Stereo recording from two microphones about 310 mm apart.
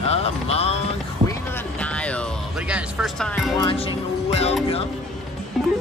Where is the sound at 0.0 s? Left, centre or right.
Centre.